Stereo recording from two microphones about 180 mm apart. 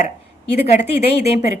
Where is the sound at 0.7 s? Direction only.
40° left (ahead or behind).